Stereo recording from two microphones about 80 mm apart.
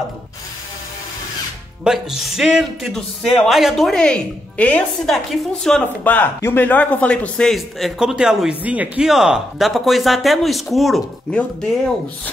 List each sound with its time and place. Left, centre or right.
1.9 s speech: centre
5.0 s speech: centre
6.0 s speech: left
7.5 s speech: centre
8.6 s speech: centre
9.0 s speech: centre
11.3 s speech: centre